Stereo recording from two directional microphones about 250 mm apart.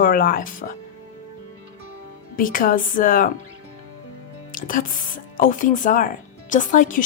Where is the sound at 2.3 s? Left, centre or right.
Left.